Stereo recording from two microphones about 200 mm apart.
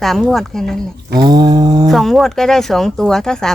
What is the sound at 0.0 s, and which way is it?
Speech, centre (ahead or behind).